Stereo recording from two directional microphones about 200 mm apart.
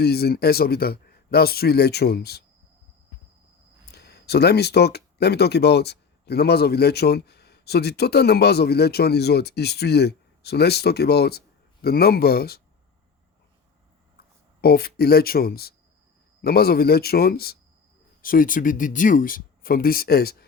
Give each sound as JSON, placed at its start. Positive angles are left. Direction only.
{"t": 0.0, "sound": "speech", "side_deg": 50}
{"t": 3.9, "sound": "speech", "side_deg": 55}
{"t": 14.6, "sound": "speech", "side_deg": 50}